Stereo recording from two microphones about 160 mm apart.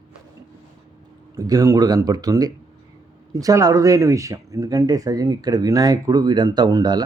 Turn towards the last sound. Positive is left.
turn(degrees=-25)  # may be behind; listen again after turning